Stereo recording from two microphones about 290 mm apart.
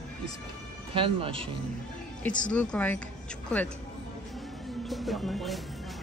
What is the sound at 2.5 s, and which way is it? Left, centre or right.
Speech, centre.